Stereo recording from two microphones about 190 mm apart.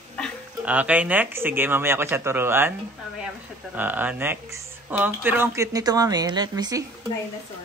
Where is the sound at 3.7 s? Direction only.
10° right (ahead or behind).